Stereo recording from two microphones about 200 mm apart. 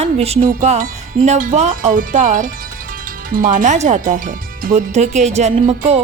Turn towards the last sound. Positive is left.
turn(degrees=-30)  # may be behind; listen again after turning